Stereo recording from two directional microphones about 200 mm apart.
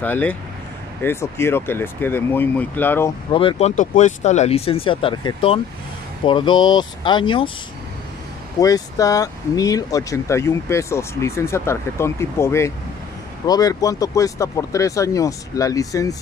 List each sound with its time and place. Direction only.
0.0 s speech: 10° left (ahead or behind)
3.3 s speech: 25° left (ahead or behind)
8.5 s speech: 15° left (ahead or behind)